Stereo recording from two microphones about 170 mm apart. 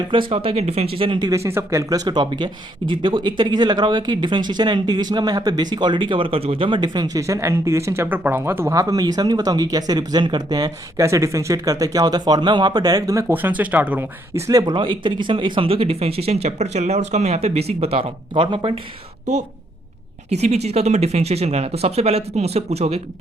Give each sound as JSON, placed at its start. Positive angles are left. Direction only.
{"t": 0.1, "sound": "speech", "side_deg": -30}
{"t": 20.3, "sound": "speech", "side_deg": -40}